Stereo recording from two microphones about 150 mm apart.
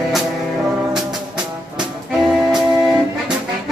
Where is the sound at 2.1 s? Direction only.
5° right (ahead or behind).